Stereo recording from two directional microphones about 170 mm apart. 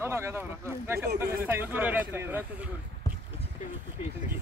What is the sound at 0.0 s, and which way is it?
Speech, 15° right (ahead or behind).